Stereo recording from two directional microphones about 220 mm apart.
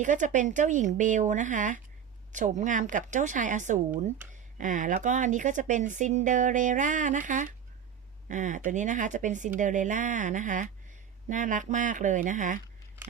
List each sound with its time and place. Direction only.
0.0 s speech: 35° right (ahead or behind)